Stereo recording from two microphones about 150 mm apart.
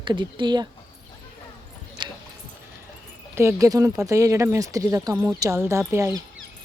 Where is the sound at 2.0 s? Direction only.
30° right (ahead or behind).